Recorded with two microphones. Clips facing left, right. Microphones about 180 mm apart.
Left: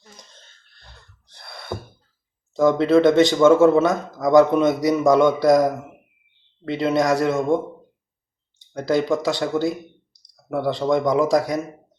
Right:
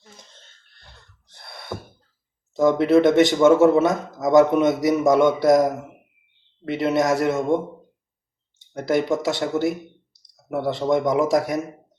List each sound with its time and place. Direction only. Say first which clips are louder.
1.3 s a sound: left 1 dB; 20° right (ahead or behind)
2.6 s speech: even; 20° right (ahead or behind)
8.7 s speech: left 1 dB; 20° right (ahead or behind)